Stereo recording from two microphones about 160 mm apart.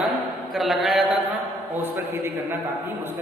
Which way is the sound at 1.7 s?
10° right (ahead or behind).